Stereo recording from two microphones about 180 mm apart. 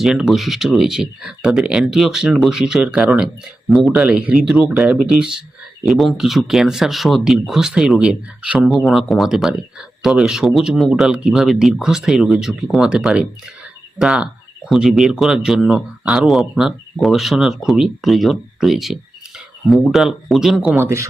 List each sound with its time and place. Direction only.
0.0 s speech: centre (ahead or behind)
20.7 s speech: 15° right (ahead or behind)